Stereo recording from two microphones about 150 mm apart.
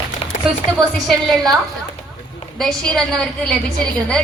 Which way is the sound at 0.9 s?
Centre (ahead or behind).